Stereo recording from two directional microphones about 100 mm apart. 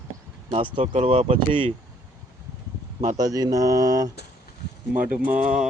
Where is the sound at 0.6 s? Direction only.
70° right (ahead or behind).